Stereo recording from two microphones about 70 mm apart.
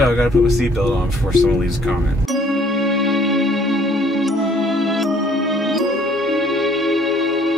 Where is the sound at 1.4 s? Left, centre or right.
Centre.